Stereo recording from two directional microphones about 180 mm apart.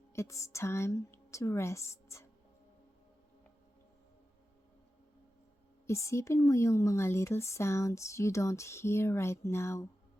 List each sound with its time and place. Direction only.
0.1 s speech: 15° left (ahead or behind)
5.9 s speech: 15° left (ahead or behind)